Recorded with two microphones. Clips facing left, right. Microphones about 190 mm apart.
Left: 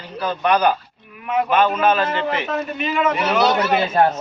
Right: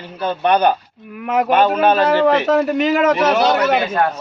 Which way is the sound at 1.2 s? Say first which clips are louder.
Right 3 dB; 75° right (ahead or behind).